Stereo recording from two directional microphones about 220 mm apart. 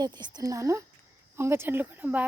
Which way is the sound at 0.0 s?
20° right (ahead or behind).